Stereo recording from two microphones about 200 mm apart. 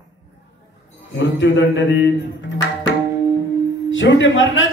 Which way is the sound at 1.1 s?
60° left (ahead or behind).